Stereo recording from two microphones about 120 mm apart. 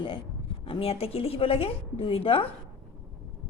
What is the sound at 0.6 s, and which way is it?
A woman's voice, 55° left (ahead or behind).